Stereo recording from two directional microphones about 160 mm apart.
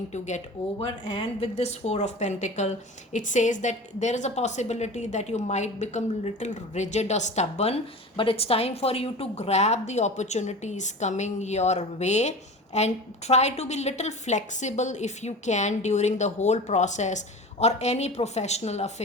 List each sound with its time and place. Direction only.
0.1 s speech: 45° left (ahead or behind)